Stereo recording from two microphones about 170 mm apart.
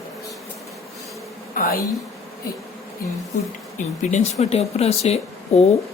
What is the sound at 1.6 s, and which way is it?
Speech, 60° left (ahead or behind).